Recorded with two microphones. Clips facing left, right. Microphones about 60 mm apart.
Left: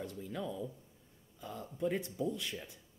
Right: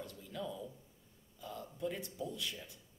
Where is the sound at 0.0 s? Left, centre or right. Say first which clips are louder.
Left 3 dB; left.